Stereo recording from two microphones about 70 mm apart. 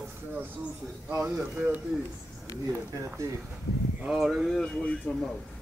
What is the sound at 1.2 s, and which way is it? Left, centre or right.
Speech, right.